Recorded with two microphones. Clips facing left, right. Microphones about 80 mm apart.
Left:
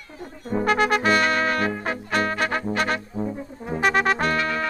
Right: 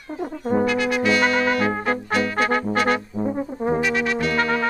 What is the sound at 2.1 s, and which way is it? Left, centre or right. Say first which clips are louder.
Trombone: even; left.